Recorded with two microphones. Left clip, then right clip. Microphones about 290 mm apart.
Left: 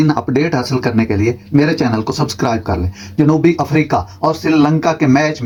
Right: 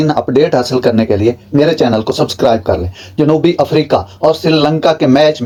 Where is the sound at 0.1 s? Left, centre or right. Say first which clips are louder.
Right 5 dB; left.